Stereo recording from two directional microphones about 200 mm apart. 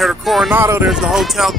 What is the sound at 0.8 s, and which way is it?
Speech, centre (ahead or behind).